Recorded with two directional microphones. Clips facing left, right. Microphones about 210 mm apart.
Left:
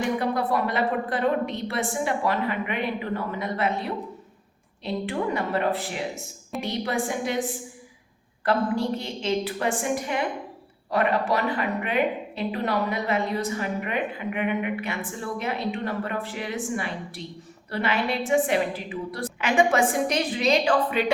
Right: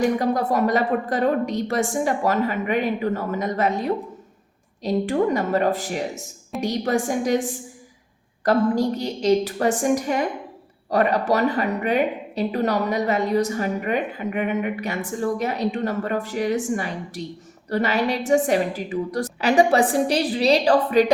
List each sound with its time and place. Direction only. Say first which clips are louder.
0.0 s a woman's voice: right 4 dB; 40° right (ahead or behind)
8.4 s a woman's voice: right 5 dB; 40° right (ahead or behind)